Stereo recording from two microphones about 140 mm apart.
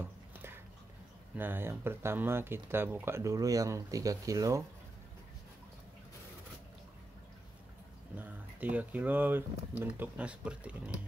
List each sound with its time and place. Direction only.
0.0 s a sound: 15° right (ahead or behind)
1.3 s speech: 15° right (ahead or behind)
8.2 s speech: 10° right (ahead or behind)